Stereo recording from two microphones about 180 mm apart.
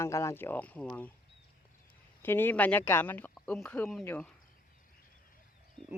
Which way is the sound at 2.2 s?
10° left (ahead or behind).